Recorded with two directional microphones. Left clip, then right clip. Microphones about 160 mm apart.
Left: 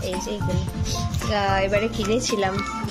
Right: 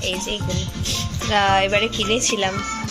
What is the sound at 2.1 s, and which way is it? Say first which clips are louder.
Speech: right 1 dB; 20° left (ahead or behind).